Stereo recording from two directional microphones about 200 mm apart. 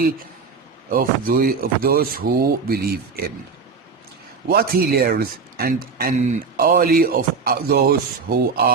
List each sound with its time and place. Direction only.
0.9 s speech: 45° right (ahead or behind)
4.4 s speech: 50° right (ahead or behind)